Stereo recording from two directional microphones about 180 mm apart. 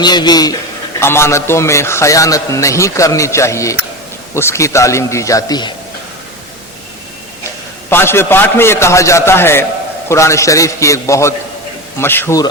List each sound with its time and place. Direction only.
0.0 s a man's voice: 25° left (ahead or behind)
7.9 s a man's voice: 15° left (ahead or behind)